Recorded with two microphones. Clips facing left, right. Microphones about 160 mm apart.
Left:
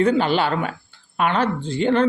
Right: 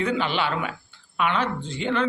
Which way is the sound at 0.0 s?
35° left (ahead or behind).